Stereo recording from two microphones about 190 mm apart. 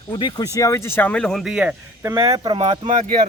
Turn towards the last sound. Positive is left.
turn(degrees=-40)  # may be behind; listen again after turning